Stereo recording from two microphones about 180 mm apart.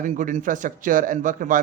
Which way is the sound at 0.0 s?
45° right (ahead or behind).